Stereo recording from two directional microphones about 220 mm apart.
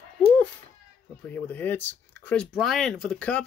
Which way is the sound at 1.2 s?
5° left (ahead or behind).